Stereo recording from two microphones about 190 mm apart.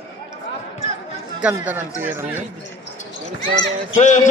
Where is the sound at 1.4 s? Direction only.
10° right (ahead or behind).